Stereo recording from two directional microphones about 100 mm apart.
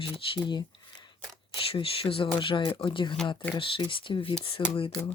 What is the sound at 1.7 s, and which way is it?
Speech, 65° left (ahead or behind).